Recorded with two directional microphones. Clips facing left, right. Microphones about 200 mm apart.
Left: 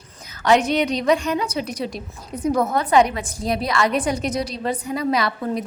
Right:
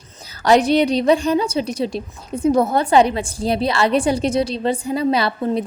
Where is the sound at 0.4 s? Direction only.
35° right (ahead or behind).